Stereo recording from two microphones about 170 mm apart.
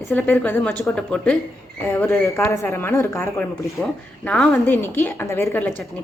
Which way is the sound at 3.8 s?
5° left (ahead or behind).